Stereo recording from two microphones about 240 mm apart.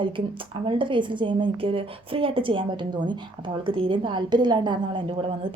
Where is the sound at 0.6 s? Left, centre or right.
Right.